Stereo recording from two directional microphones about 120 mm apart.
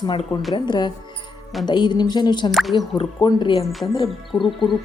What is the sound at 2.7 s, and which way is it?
A woman's voice, 40° left (ahead or behind).